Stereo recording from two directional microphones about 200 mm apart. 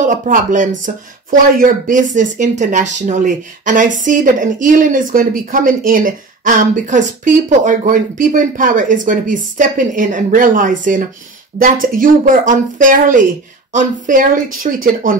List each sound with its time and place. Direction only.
0.0 s speech: 40° right (ahead or behind)